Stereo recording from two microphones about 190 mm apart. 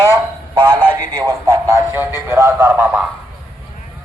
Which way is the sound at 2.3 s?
15° right (ahead or behind).